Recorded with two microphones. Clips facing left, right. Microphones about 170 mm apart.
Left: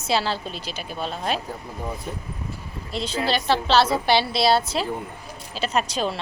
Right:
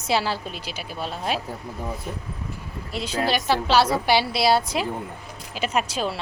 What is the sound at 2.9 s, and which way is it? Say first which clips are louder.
A woman's voice: even; 10° right (ahead or behind).